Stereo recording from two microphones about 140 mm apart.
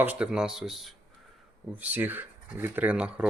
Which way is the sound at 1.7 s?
10° right (ahead or behind).